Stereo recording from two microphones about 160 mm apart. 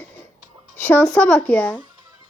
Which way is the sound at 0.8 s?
10° left (ahead or behind).